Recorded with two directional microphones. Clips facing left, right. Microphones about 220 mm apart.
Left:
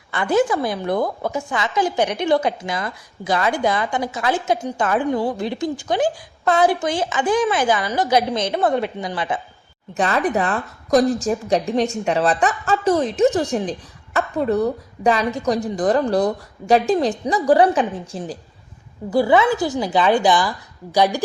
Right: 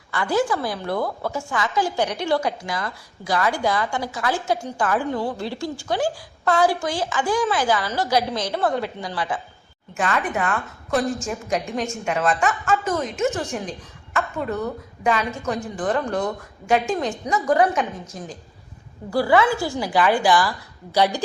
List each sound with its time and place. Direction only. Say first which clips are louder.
0.1 s a woman's voice: left 4 dB; 20° left (ahead or behind)
10.0 s a woman's voice: left 4 dB; 35° left (ahead or behind)
19.1 s a woman's voice: left 3 dB; 20° left (ahead or behind)